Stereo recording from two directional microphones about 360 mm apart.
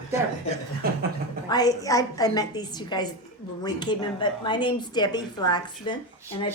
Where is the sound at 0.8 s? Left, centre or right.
Right.